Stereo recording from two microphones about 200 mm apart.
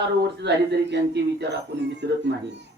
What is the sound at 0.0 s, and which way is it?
A woman's voice, 60° right (ahead or behind).